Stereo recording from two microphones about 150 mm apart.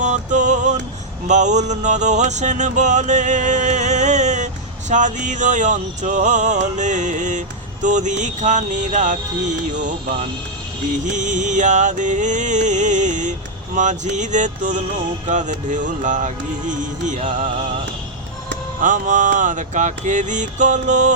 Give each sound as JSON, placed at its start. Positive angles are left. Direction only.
{"t": 0.0, "sound": "music", "side_deg": -55}
{"t": 11.0, "sound": "music", "side_deg": -55}
{"t": 18.8, "sound": "music", "side_deg": -60}